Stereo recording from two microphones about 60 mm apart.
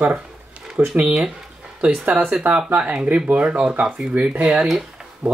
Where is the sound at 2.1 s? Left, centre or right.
Right.